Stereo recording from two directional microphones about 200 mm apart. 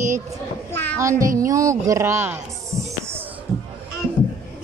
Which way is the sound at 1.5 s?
15° right (ahead or behind).